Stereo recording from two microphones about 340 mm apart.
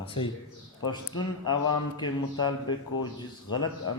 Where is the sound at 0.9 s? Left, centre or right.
Centre.